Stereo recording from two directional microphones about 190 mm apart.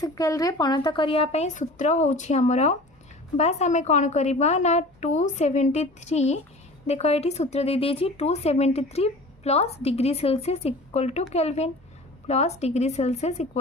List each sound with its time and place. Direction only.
0.0 s a woman's voice: 20° left (ahead or behind); by 13.6 s 35° left (ahead or behind)